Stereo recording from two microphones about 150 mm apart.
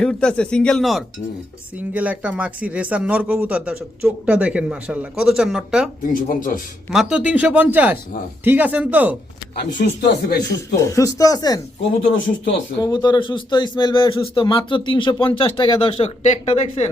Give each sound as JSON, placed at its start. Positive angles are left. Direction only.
{"t": 0.0, "sound": "speech", "side_deg": 5}
{"t": 6.0, "sound": "speech", "side_deg": 65}
{"t": 6.9, "sound": "speech", "side_deg": -5}
{"t": 9.6, "sound": "speech", "side_deg": 90}
{"t": 10.8, "sound": "speech", "side_deg": 20}
{"t": 12.8, "sound": "speech", "side_deg": 30}